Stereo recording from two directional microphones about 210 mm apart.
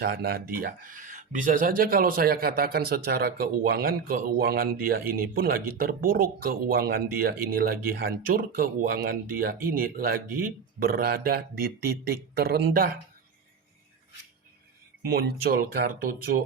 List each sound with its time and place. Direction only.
0.0 s speech: 50° right (ahead or behind)
15.0 s speech: 45° right (ahead or behind)